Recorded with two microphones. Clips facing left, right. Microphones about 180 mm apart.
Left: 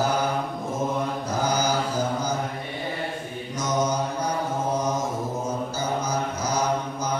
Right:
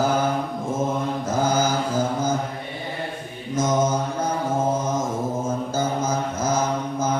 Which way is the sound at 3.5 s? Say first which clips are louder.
Right 5 dB; 50° right (ahead or behind).